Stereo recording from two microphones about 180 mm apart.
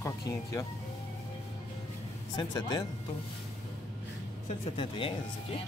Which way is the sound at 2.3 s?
25° left (ahead or behind).